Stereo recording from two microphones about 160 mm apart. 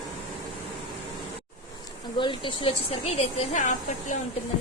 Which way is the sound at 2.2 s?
30° left (ahead or behind).